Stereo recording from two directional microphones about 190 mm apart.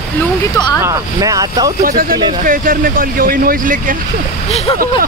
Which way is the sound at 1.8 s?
50° right (ahead or behind).